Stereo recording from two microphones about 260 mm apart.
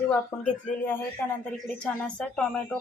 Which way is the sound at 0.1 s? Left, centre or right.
Centre.